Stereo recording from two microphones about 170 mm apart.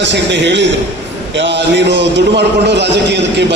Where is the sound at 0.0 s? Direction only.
90° right.